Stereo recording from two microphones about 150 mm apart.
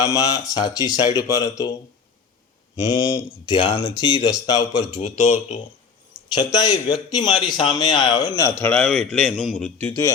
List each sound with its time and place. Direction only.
0.0 s speech: 20° left (ahead or behind)
2.8 s speech: 25° left (ahead or behind)
4.4 s speech: 25° left (ahead or behind)
4.9 s a man's voice: 50° left (ahead or behind)
6.3 s speech: 30° left (ahead or behind)
8.5 s a man's voice: 10° left (ahead or behind)
9.0 s a man's voice: centre (ahead or behind)
9.8 s speech: 20° left (ahead or behind)